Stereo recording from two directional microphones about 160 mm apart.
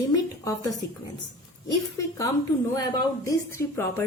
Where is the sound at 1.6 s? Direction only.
20° left (ahead or behind).